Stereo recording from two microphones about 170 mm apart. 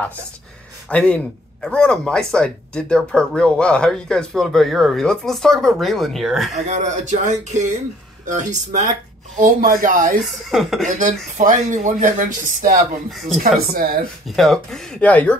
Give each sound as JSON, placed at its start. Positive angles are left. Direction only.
{"t": 0.8, "sound": "speech", "side_deg": 5}
{"t": 6.6, "sound": "speech", "side_deg": -45}
{"t": 10.2, "sound": "speech", "side_deg": 0}
{"t": 10.9, "sound": "speech", "side_deg": -45}
{"t": 13.1, "sound": "speech", "side_deg": 0}
{"t": 13.6, "sound": "speech", "side_deg": -60}
{"t": 14.2, "sound": "speech", "side_deg": 0}